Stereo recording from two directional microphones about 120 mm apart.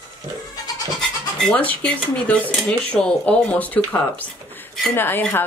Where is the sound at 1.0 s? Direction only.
5° left (ahead or behind).